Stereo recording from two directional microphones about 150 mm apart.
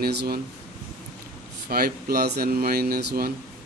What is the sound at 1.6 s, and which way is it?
Speech, 90° right.